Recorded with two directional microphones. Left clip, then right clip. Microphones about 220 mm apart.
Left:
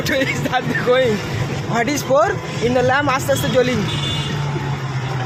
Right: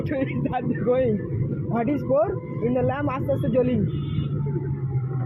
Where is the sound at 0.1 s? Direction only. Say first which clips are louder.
Left 9 dB; 10° left (ahead or behind).